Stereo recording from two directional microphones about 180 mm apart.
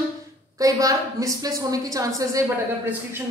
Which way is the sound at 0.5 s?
20° right (ahead or behind).